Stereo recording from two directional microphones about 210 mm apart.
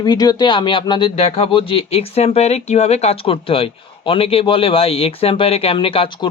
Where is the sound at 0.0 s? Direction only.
20° left (ahead or behind).